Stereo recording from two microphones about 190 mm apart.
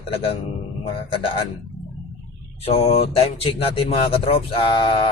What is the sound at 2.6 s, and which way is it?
Speech, 30° left (ahead or behind).